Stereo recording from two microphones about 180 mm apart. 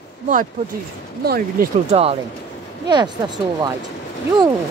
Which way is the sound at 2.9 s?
25° right (ahead or behind).